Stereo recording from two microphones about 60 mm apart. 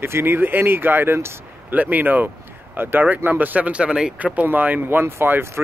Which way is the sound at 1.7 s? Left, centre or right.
Right.